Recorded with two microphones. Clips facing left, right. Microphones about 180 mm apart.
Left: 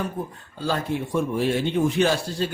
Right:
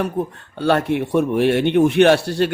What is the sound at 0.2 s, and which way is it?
A man's voice, 70° right (ahead or behind).